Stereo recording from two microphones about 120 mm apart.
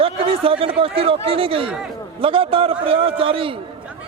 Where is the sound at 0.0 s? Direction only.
50° right (ahead or behind).